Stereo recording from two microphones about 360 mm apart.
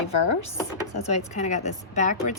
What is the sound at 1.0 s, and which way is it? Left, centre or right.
Speech, centre.